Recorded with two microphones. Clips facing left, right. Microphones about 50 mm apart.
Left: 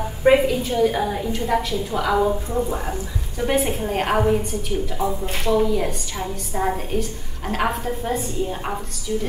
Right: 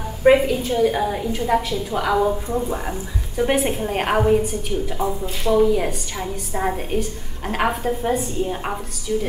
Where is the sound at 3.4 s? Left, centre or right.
Centre.